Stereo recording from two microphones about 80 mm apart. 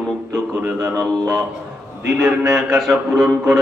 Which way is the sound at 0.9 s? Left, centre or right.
Right.